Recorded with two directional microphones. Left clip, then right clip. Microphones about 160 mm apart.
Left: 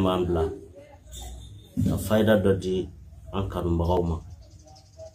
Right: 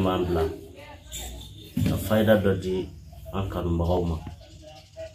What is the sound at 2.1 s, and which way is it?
Speech, 25° left (ahead or behind).